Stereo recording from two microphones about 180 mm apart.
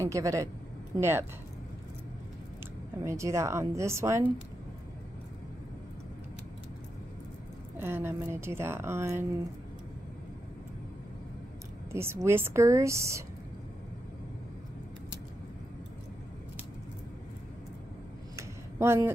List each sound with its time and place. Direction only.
0.0 s speech: 15° right (ahead or behind)
3.0 s speech: 15° right (ahead or behind)
7.7 s speech: 15° right (ahead or behind)
11.9 s speech: 15° right (ahead or behind)
18.3 s a sound: 15° right (ahead or behind)